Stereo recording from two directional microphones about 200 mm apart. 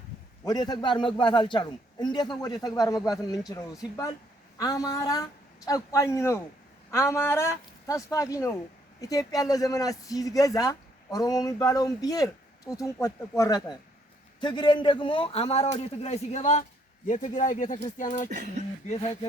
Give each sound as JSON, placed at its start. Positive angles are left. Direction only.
{"t": 0.4, "sound": "a man's voice", "side_deg": 20}